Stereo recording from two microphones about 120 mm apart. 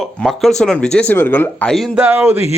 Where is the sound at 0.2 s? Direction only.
Centre (ahead or behind); by 1.7 s 15° left (ahead or behind).